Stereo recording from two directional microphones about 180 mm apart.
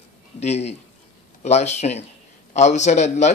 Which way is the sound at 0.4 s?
35° left (ahead or behind).